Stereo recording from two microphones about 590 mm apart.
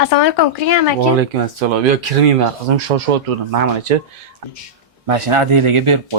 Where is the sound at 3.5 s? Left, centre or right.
Right.